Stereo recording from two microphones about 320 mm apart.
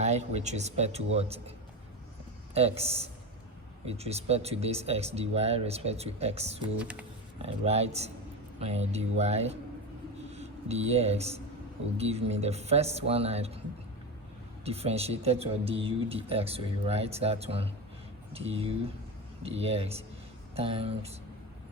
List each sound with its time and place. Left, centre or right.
0.0 s speech: right
2.6 s speech: centre
6.7 s speech: centre
7.4 s speech: centre
14.6 s speech: centre
19.4 s speech: centre